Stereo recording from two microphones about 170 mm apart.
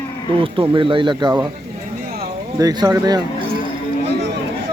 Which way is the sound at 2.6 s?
20° right (ahead or behind).